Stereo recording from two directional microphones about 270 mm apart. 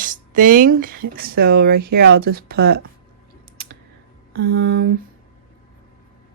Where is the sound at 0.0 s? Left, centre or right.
Right.